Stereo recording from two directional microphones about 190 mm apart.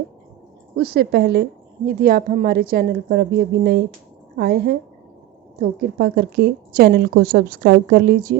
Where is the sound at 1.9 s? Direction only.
50° right (ahead or behind).